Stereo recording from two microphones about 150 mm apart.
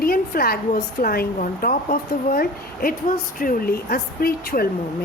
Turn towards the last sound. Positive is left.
turn(degrees=90)